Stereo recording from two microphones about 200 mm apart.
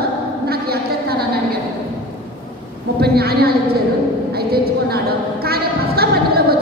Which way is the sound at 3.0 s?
50° right (ahead or behind).